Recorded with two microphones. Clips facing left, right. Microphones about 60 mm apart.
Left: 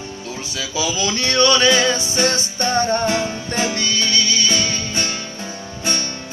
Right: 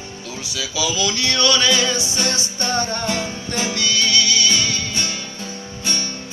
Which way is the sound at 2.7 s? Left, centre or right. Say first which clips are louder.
Left 5 dB; left.